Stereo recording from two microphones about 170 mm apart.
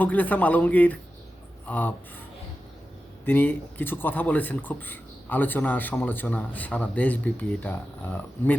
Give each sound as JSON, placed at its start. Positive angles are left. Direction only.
{"t": 0.0, "sound": "speech", "side_deg": 10}
{"t": 3.2, "sound": "speech", "side_deg": 10}